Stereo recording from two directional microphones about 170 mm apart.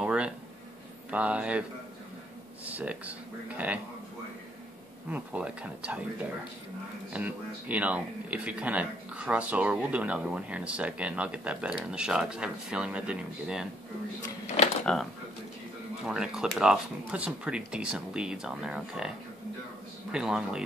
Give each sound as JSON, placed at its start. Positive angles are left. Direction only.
{"t": 0.0, "sound": "a sound", "side_deg": -5}
{"t": 1.1, "sound": "speech", "side_deg": -5}
{"t": 5.1, "sound": "speech", "side_deg": -10}
{"t": 7.1, "sound": "speech", "side_deg": -10}
{"t": 14.6, "sound": "a sound", "side_deg": 40}
{"t": 16.1, "sound": "speech", "side_deg": -5}